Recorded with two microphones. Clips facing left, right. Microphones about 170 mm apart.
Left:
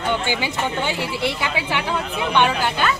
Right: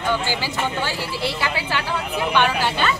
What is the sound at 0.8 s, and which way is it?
A woman's voice, 20° left (ahead or behind).